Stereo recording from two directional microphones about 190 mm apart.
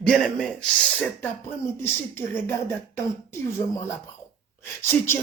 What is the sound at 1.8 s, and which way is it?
Speech, 10° left (ahead or behind).